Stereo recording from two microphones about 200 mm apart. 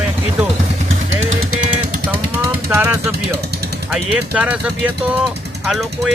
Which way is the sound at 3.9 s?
5° right (ahead or behind).